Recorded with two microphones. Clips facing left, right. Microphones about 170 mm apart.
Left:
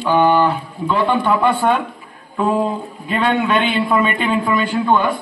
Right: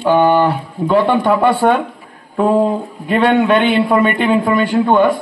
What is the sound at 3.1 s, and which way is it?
A man's voice, 60° right (ahead or behind).